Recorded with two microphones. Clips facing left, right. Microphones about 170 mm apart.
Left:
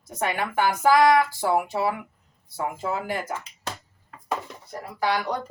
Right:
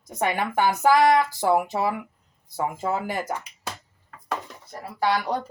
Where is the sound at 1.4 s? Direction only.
45° right (ahead or behind).